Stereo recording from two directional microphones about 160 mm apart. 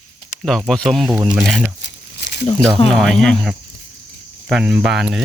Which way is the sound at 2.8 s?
5° left (ahead or behind).